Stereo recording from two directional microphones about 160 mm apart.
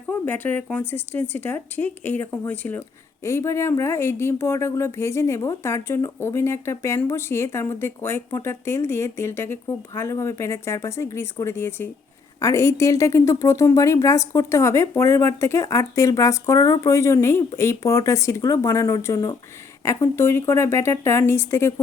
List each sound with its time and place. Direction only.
0.1 s speech: 10° left (ahead or behind)